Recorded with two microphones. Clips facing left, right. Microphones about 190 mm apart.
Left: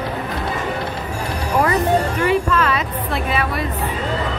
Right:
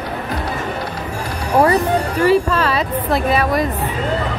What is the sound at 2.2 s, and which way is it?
Speech, 35° right (ahead or behind).